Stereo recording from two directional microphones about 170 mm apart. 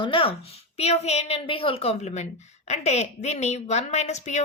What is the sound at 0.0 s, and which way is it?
A woman's voice, 30° left (ahead or behind).